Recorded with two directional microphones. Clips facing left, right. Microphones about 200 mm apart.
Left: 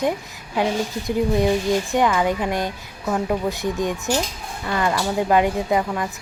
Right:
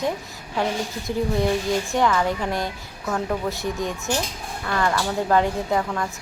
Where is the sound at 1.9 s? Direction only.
15° left (ahead or behind).